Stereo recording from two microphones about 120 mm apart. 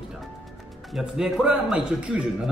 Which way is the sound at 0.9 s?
5° right (ahead or behind).